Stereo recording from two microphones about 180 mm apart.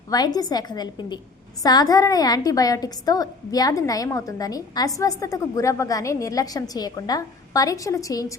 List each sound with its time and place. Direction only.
0.1 s a woman's voice: 20° left (ahead or behind)